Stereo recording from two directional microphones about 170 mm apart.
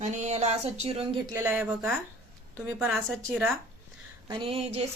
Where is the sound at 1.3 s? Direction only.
15° right (ahead or behind).